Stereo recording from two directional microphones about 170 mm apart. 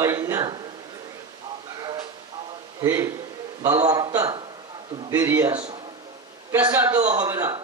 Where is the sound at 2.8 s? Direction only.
15° right (ahead or behind).